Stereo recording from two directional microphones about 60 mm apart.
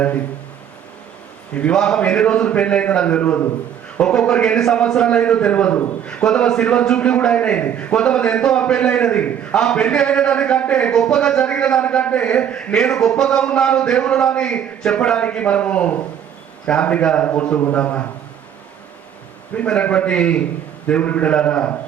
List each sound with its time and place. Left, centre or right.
1.7 s a man's voice: centre
6.2 s a man's voice: centre
19.5 s a man's voice: centre